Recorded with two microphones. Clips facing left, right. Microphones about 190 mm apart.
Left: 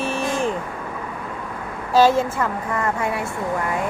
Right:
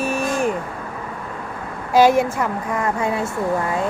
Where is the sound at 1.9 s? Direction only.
15° right (ahead or behind).